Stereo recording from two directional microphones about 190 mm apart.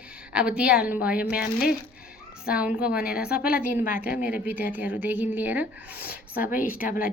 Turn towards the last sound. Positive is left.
turn(degrees=-10)  # may be behind; listen again after turning